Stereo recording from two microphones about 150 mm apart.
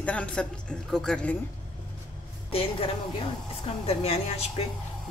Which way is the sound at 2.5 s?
40° left (ahead or behind).